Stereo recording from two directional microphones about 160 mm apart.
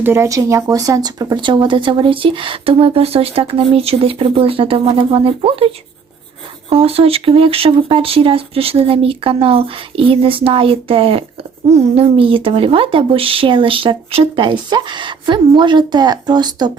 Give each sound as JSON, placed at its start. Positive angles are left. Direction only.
{"t": 0.0, "sound": "speech", "side_deg": -15}